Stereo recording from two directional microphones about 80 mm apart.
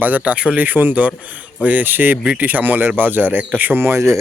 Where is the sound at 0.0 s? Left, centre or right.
Centre.